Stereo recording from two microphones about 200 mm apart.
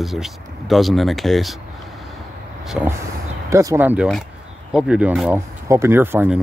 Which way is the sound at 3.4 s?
15° right (ahead or behind).